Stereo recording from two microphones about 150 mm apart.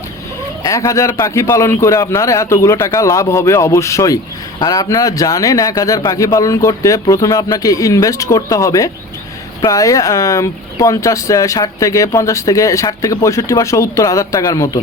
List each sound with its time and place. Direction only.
0.6 s speech: 20° left (ahead or behind)